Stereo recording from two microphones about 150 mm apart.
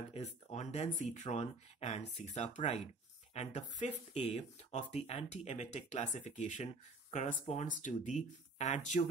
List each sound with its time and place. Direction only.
0.1 s speech: 45° left (ahead or behind)